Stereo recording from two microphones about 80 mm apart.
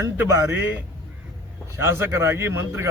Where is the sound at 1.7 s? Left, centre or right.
Right.